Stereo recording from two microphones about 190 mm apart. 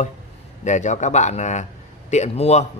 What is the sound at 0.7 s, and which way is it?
A man's voice, 40° left (ahead or behind).